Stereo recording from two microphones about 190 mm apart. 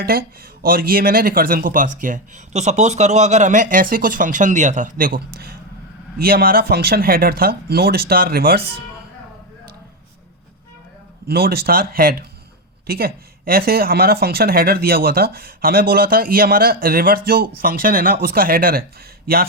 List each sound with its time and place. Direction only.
0.0 s speech: 50° right (ahead or behind)
11.3 s speech: 55° right (ahead or behind)